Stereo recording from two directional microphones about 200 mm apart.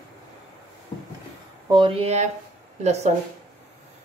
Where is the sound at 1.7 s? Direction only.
25° right (ahead or behind).